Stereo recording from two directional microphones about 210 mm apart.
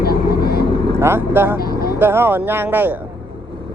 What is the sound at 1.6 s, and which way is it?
Vehicle, 45° left (ahead or behind).